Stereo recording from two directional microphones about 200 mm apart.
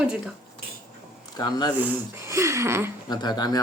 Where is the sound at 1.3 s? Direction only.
20° left (ahead or behind).